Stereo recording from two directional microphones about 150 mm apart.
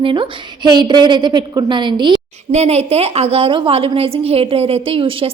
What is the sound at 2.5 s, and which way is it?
A woman's voice, 45° right (ahead or behind).